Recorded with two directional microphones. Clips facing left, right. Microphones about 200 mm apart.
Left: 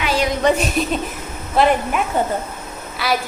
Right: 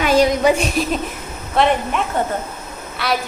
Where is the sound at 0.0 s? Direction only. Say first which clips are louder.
Right 6 dB; 45° right (ahead or behind).